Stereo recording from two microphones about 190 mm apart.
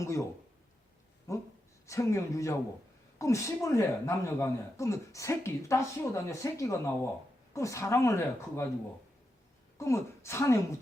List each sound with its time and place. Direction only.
0.0 s speech: 15° left (ahead or behind)
1.9 s speech: 15° left (ahead or behind)
9.7 s speech: 15° left (ahead or behind)